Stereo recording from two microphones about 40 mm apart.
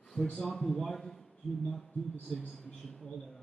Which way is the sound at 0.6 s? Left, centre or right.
Centre.